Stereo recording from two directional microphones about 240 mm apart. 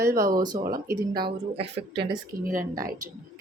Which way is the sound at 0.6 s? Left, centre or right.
Right.